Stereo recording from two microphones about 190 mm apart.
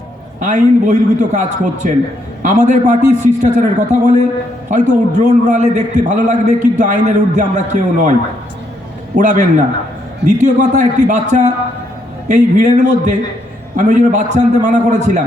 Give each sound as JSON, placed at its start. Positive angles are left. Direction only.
{"t": 0.3, "sound": "a man's voice", "side_deg": -40}
{"t": 9.1, "sound": "a man's voice", "side_deg": -40}